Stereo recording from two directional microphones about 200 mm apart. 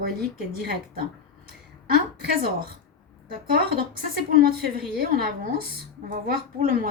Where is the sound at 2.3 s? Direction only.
50° right (ahead or behind).